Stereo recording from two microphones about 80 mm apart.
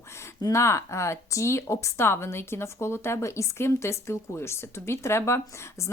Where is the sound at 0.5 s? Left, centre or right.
Left.